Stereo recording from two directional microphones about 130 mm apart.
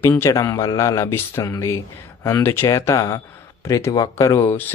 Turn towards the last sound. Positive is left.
turn(degrees=20)  # may be behind; listen again after turning